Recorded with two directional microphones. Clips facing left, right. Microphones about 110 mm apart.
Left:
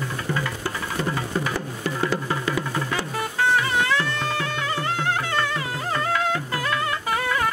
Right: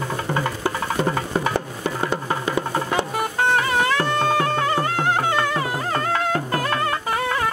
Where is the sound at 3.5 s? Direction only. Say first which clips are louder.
Right 2 dB; 50° right (ahead or behind).